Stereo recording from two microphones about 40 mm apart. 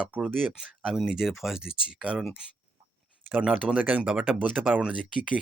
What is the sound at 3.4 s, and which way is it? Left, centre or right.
Speech, right.